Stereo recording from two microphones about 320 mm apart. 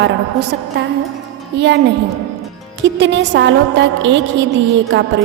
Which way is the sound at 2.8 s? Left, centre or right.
Right.